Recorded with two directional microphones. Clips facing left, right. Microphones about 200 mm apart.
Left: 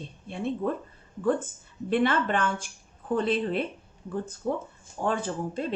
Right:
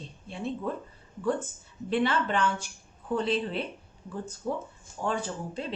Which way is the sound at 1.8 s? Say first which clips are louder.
Left 2 dB; 50° left (ahead or behind).